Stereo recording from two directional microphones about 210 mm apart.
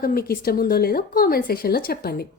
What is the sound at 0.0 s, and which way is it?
A woman's voice, 45° left (ahead or behind).